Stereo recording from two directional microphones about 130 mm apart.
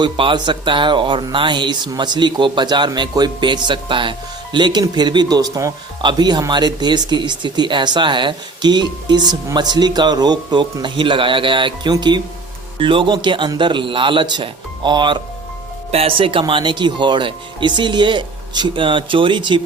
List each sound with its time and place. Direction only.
0.0 s speech: 40° right (ahead or behind)
15.9 s speech: 50° right (ahead or behind)